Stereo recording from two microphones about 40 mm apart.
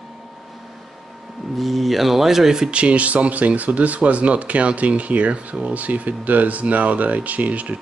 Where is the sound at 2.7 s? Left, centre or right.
Right.